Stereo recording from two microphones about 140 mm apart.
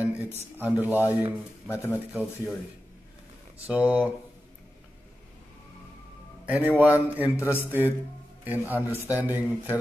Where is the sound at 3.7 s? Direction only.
10° right (ahead or behind).